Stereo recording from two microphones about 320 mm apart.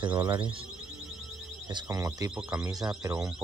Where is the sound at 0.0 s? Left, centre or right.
Centre.